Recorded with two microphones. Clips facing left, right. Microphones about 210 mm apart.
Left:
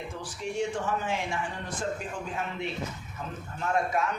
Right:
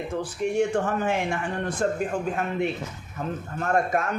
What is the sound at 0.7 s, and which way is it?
A man's voice, 55° right (ahead or behind).